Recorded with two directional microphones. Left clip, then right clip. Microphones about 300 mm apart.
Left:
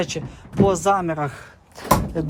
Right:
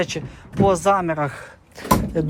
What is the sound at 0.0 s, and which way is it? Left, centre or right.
A man's voice, centre.